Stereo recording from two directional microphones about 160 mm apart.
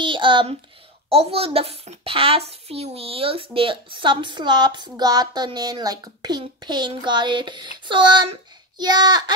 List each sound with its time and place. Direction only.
0.0 s a child's voice: 30° right (ahead or behind)